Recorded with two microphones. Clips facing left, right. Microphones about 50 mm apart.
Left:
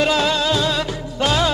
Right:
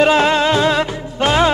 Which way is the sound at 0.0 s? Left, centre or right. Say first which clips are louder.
Right 5 dB; right.